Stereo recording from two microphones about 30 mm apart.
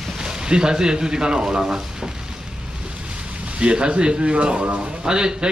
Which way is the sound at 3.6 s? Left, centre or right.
Right.